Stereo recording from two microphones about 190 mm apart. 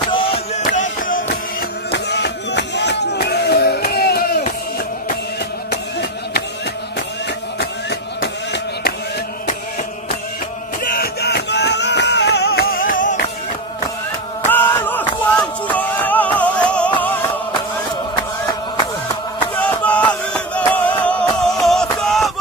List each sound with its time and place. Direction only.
0.1 s a sound: 25° left (ahead or behind)
0.7 s music: 45° left (ahead or behind)
1.9 s music: 65° left (ahead or behind)
5.7 s a sound: 55° left (ahead or behind)
10.8 s music: 55° left (ahead or behind)
12.9 s music: 45° left (ahead or behind)
14.4 s music: 10° left (ahead or behind)
19.5 s music: 10° left (ahead or behind)